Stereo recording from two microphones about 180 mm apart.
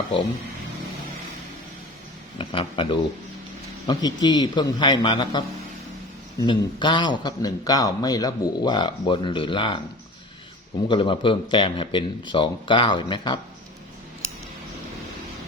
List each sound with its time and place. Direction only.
2.4 s a man's voice: 30° left (ahead or behind)
6.4 s a man's voice: 25° left (ahead or behind)
10.8 s a man's voice: 25° left (ahead or behind)